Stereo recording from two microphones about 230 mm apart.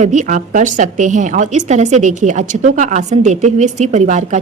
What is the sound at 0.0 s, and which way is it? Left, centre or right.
A woman's voice, right.